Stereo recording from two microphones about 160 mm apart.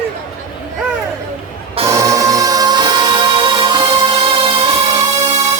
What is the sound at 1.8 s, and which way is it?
Music, 20° right (ahead or behind).